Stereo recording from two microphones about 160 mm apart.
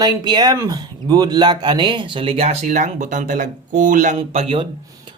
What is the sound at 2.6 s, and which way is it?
Speech, 50° right (ahead or behind).